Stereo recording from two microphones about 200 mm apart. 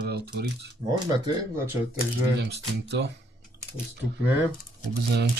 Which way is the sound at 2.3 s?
55° right (ahead or behind).